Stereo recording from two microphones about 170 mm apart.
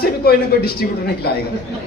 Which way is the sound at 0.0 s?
65° left (ahead or behind).